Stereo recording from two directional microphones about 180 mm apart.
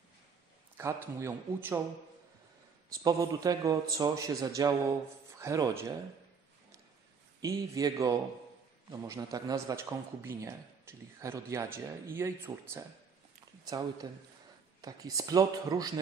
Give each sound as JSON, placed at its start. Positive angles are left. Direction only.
{"t": 0.7, "sound": "a man's voice", "side_deg": -15}
{"t": 2.9, "sound": "a man's voice", "side_deg": -20}
{"t": 7.4, "sound": "a man's voice", "side_deg": -20}
{"t": 14.0, "sound": "a man's voice", "side_deg": -20}